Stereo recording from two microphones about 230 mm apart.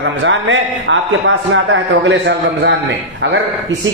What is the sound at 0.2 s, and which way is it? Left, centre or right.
A woman's voice, right.